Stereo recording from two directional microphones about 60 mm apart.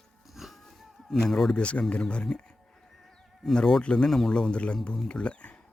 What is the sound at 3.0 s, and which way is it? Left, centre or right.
Sheep, centre.